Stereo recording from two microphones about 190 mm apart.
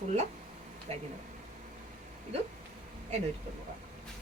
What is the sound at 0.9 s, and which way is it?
Speech, 30° right (ahead or behind).